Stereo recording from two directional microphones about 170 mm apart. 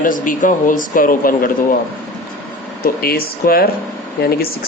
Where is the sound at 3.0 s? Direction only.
60° left (ahead or behind).